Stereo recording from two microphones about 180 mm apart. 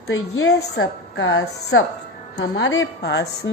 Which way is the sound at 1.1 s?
90° left.